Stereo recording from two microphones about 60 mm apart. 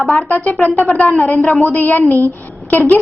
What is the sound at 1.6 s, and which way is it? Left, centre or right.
Speech, left.